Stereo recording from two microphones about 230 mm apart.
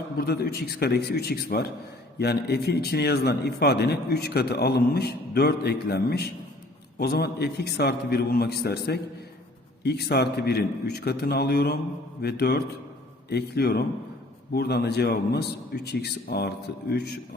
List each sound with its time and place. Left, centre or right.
0.2 s a man's voice: left